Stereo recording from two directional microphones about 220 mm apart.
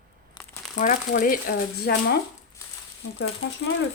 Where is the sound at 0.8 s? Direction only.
35° left (ahead or behind).